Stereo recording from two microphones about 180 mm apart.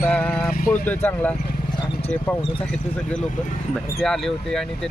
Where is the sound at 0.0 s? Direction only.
5° left (ahead or behind).